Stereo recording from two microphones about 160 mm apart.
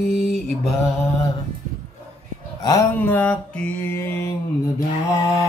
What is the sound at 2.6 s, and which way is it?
Mantra, 20° left (ahead or behind).